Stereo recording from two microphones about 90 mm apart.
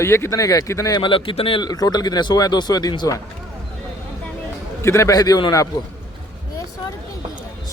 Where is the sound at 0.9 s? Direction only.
70° left (ahead or behind).